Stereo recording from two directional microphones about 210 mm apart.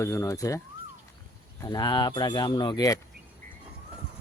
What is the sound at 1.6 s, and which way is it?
Speech, 20° left (ahead or behind).